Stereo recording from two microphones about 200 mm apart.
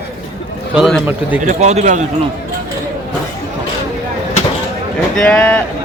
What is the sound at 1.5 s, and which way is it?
Speech, 35° right (ahead or behind).